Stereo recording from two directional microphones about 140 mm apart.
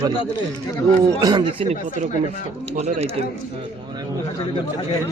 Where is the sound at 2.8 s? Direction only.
50° right (ahead or behind).